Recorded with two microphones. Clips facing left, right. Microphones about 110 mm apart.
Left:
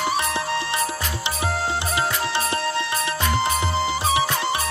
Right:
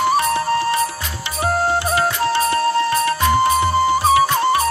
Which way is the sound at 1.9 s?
20° left (ahead or behind).